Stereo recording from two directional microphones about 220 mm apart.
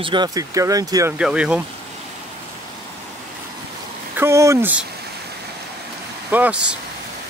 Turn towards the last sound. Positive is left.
turn(degrees=-5)  # may be behind; listen again after turning